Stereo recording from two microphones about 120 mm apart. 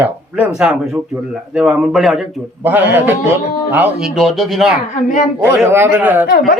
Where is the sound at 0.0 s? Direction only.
15° right (ahead or behind).